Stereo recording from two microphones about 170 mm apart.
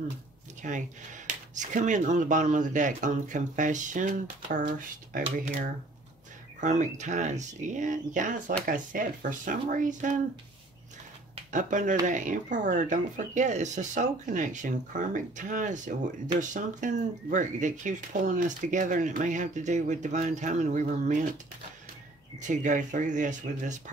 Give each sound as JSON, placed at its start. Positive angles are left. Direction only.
{"t": 0.6, "sound": "speech", "side_deg": -45}
{"t": 6.6, "sound": "speech", "side_deg": -45}
{"t": 11.5, "sound": "speech", "side_deg": -50}
{"t": 22.5, "sound": "speech", "side_deg": -45}